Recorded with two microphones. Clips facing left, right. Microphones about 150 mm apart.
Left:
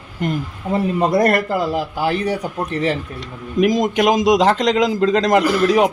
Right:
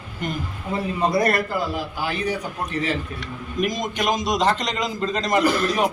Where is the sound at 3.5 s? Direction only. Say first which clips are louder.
Left 9 dB; 90° left.